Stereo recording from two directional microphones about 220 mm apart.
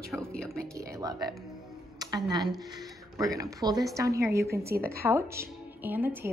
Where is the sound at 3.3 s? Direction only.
15° right (ahead or behind).